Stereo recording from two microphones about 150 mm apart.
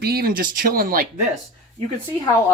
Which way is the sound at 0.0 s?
90° right.